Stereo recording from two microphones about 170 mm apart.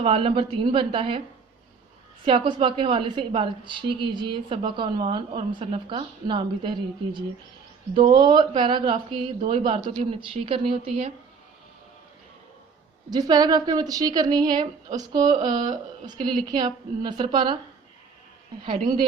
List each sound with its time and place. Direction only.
0.0 s a woman's voice: 35° right (ahead or behind)
2.2 s a woman's voice: 30° right (ahead or behind)
13.1 s a woman's voice: 25° right (ahead or behind)